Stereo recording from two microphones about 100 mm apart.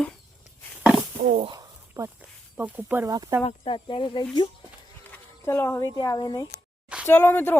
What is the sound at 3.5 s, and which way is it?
Speech, 65° left (ahead or behind).